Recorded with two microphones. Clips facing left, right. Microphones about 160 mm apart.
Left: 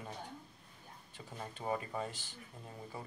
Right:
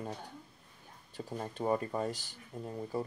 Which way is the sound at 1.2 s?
40° right (ahead or behind).